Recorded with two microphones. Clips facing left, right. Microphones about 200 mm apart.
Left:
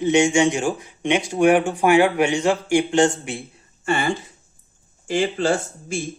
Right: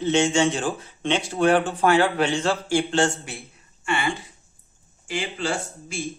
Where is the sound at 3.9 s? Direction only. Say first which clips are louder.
Left 4 dB; 40° left (ahead or behind).